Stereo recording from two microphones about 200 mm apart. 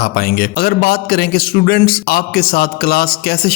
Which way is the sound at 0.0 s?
50° left (ahead or behind).